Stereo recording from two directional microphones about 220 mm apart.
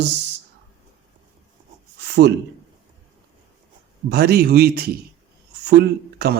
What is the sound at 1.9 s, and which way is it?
Speech, 50° right (ahead or behind).